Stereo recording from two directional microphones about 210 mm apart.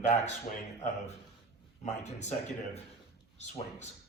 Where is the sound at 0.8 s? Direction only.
30° left (ahead or behind).